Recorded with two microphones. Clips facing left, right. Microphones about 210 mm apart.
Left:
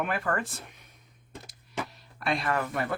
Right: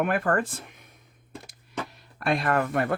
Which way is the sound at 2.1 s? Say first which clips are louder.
Right 4 dB; 50° right (ahead or behind).